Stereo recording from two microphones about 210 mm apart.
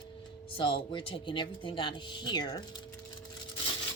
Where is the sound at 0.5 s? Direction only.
25° left (ahead or behind).